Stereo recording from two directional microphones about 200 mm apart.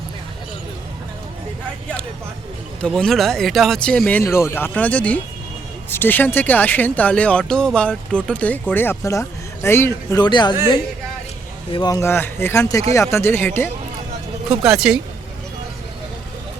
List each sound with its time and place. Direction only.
2.8 s speech: 5° left (ahead or behind); by 10.5 s 20° left (ahead or behind)
11.7 s speech: 20° left (ahead or behind)
14.5 s speech: 5° right (ahead or behind)